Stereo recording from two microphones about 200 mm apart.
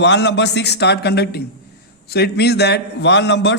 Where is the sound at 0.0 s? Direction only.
60° left (ahead or behind).